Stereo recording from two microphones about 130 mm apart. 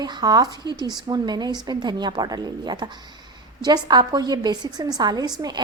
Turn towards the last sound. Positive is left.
turn(degrees=-30)  # may be behind; listen again after turning